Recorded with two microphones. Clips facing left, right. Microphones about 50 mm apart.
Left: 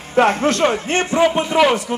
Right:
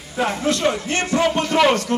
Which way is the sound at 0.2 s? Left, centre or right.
Left.